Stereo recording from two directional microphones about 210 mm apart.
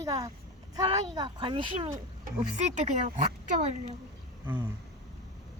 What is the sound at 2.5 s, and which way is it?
Speech, 35° right (ahead or behind).